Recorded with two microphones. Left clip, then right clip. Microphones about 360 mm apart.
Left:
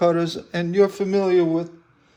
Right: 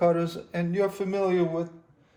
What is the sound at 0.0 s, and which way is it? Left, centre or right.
A man's voice, left.